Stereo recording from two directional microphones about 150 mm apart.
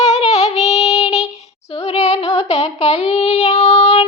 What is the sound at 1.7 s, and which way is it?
Female singing, 45° left (ahead or behind).